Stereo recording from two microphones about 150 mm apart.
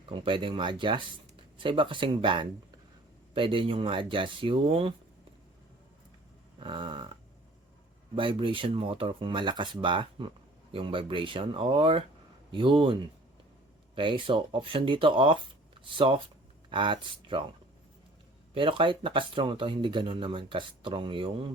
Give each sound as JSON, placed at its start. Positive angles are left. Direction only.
{"t": 0.1, "sound": "speech", "side_deg": -35}
{"t": 6.6, "sound": "speech", "side_deg": -35}
{"t": 18.5, "sound": "speech", "side_deg": -35}